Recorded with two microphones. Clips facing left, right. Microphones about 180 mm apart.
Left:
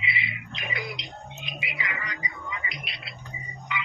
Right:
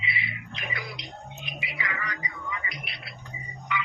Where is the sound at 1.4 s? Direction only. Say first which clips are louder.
Even; 20° left (ahead or behind).